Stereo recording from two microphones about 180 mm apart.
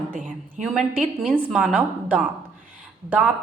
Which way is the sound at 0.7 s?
5° right (ahead or behind).